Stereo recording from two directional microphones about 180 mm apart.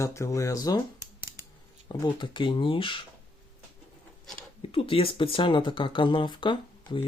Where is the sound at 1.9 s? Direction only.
25° left (ahead or behind).